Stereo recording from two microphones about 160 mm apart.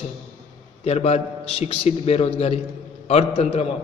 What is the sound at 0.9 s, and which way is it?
A man's voice, 40° left (ahead or behind).